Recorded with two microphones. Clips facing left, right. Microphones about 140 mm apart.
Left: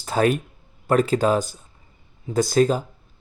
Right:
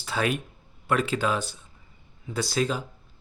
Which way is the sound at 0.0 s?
40° left (ahead or behind).